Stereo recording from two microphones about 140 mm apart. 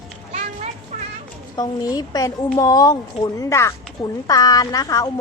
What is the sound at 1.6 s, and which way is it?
Speech, 25° left (ahead or behind).